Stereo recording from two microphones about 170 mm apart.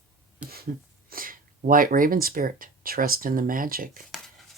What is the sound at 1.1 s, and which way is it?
Speech, 55° right (ahead or behind).